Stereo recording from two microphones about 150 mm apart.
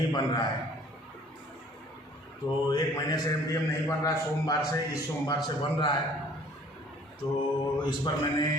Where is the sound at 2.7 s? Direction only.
20° left (ahead or behind).